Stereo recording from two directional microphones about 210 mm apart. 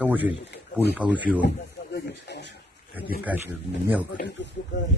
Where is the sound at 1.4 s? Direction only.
55° left (ahead or behind).